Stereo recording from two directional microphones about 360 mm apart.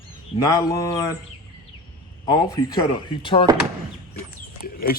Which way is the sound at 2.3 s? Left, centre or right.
Centre.